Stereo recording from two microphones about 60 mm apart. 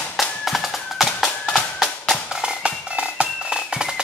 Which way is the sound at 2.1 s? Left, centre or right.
Centre.